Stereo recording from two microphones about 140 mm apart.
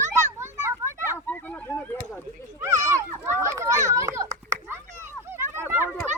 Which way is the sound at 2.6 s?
25° right (ahead or behind).